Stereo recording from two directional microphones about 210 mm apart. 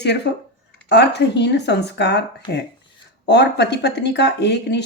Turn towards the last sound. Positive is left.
turn(degrees=55)  # may be behind; listen again after turning